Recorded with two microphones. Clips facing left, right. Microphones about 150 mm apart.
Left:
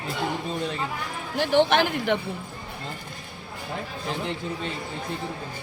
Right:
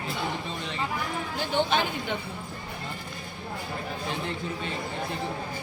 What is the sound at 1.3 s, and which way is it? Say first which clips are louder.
Speech: left 7 dB; 75° left (ahead or behind).